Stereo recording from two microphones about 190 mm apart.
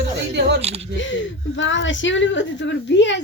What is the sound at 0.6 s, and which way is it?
Speech, 35° right (ahead or behind).